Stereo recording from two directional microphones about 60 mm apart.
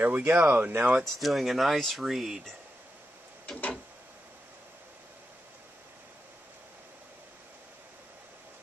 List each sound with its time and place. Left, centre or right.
0.0 s speech: right
1.0 s speech: centre